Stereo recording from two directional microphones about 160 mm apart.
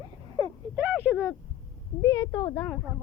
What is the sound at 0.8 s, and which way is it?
Speech, 10° right (ahead or behind).